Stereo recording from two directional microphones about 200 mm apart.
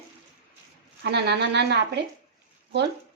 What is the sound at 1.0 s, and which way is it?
Speech, 55° right (ahead or behind).